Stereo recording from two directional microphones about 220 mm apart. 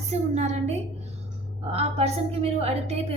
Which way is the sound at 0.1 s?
30° right (ahead or behind).